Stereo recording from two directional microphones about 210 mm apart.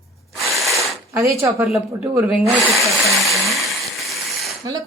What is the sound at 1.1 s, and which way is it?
Speech, 15° right (ahead or behind).